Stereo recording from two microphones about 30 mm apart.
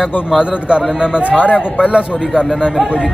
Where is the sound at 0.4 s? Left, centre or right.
Right.